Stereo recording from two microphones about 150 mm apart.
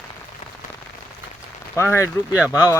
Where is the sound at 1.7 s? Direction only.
15° left (ahead or behind).